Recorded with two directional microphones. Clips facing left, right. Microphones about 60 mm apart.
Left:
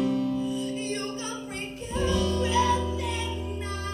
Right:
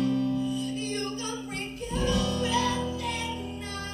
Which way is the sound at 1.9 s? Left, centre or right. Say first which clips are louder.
Left 2 dB; left.